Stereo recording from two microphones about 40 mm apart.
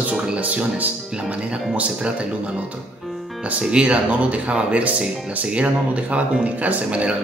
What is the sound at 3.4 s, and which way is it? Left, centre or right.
Speech, right.